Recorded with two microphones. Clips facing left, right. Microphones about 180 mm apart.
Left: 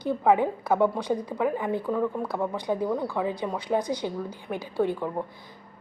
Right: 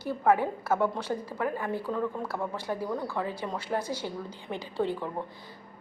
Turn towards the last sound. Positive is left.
turn(degrees=15)  # may be behind; listen again after turning